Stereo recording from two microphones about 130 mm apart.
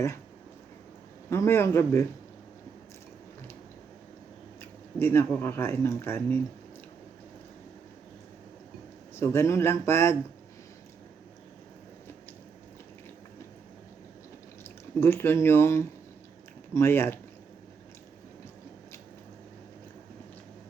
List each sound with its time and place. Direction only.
1.3 s speech: 20° left (ahead or behind)
4.9 s speech: 20° left (ahead or behind)
9.1 s speech: 20° left (ahead or behind)
15.0 s speech: 15° left (ahead or behind)